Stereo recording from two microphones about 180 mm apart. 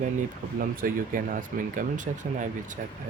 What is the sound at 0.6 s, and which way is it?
Speech, 50° right (ahead or behind).